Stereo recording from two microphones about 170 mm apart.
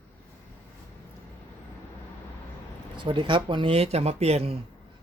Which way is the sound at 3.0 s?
30° right (ahead or behind).